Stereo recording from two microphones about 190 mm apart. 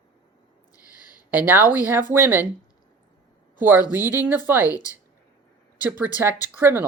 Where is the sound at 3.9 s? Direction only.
10° right (ahead or behind).